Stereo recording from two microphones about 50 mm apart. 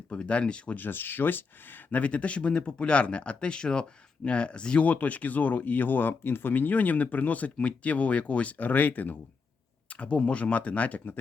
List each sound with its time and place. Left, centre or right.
0.1 s speech: left
0.8 s speech: left
2.0 s speech: left
4.9 s speech: left
6.5 s speech: left
9.9 s speech: left